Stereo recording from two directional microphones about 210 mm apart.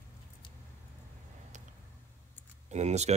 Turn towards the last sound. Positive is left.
turn(degrees=-30)  # may be behind; listen again after turning